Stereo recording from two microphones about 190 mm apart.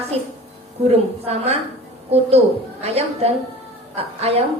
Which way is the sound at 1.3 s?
35° right (ahead or behind).